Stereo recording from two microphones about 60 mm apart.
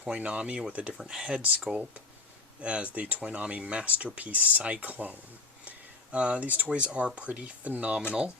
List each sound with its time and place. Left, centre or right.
0.0 s speech: right
1.0 s speech: centre